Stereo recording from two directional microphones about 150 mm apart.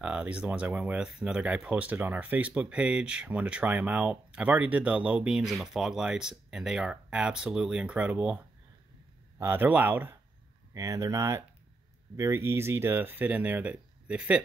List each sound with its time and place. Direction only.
0.0 s speech: 10° right (ahead or behind)
9.4 s speech: 15° right (ahead or behind)